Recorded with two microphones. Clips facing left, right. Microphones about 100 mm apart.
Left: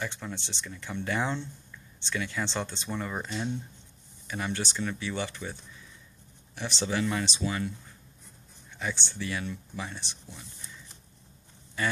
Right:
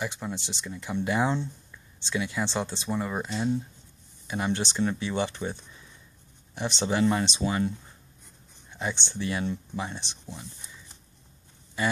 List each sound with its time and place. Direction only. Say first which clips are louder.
0.0 s speech: right 3 dB; 10° right (ahead or behind)
4.3 s speech: right 4 dB; 20° right (ahead or behind)
8.7 s speech: right 3 dB; 25° right (ahead or behind)